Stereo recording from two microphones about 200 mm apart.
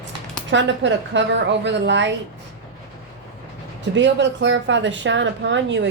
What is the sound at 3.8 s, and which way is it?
Speech, 65° right (ahead or behind).